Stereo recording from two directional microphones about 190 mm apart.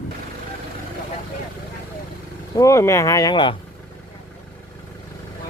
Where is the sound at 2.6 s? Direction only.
15° left (ahead or behind).